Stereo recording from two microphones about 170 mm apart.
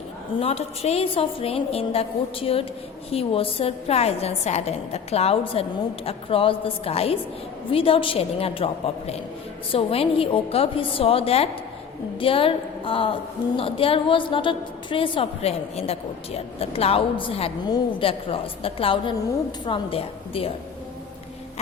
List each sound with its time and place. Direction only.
0.3 s a woman's voice: 35° left (ahead or behind)